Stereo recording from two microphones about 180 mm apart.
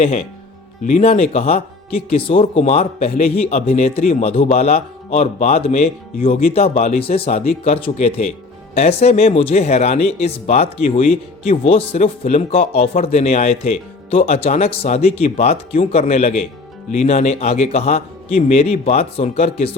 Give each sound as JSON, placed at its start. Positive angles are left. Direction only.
{"t": 0.9, "sound": "speech", "side_deg": 40}